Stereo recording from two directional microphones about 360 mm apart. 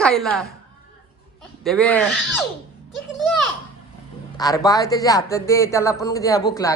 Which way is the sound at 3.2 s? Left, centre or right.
Centre.